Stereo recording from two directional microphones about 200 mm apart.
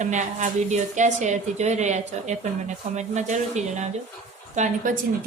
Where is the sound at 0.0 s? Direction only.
40° right (ahead or behind).